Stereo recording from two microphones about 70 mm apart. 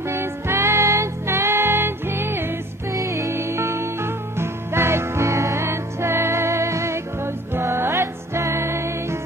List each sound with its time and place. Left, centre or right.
0.1 s music: right
2.9 s music: right